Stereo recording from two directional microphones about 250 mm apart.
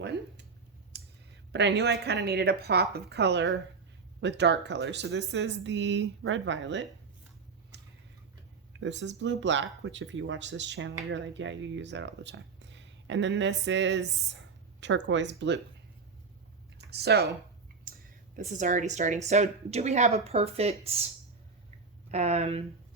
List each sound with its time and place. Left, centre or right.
0.0 s a sound: right
0.9 s clicking: right
1.5 s a woman's voice: right
7.7 s tick-tock: right
8.7 s speech: right
16.7 s speech: right
17.9 s a sound: right
18.3 s a woman's voice: right
22.1 s a woman's voice: right